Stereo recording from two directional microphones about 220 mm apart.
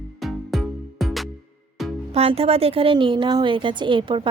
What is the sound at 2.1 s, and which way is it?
A woman's voice, 25° right (ahead or behind).